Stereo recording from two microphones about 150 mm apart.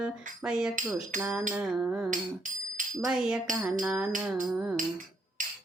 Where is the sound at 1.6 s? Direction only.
5° right (ahead or behind).